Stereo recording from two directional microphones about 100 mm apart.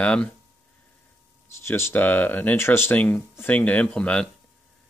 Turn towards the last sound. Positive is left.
turn(degrees=10)  # may be behind; listen again after turning